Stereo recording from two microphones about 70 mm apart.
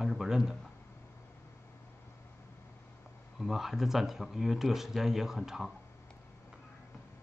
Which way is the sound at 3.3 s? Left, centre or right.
Centre.